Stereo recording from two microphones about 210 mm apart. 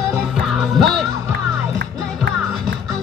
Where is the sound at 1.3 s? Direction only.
55° right (ahead or behind).